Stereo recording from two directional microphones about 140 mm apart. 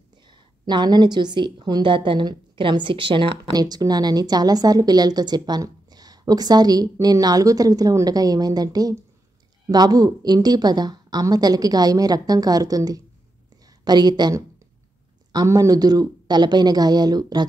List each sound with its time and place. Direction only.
0.3 s a woman's voice: 35° right (ahead or behind)